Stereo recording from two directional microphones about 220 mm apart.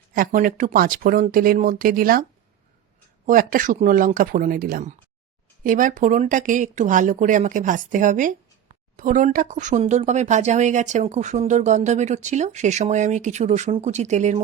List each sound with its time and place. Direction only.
0.1 s speech: 35° right (ahead or behind)
3.2 s speech: 40° right (ahead or behind)